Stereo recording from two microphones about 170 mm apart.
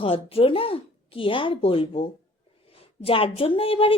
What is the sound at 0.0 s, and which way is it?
Speech, 35° left (ahead or behind).